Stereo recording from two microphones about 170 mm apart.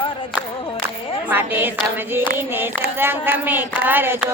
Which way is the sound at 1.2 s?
10° right (ahead or behind).